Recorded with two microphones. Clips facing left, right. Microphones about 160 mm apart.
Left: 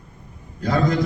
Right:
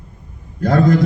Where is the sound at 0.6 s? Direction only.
50° right (ahead or behind).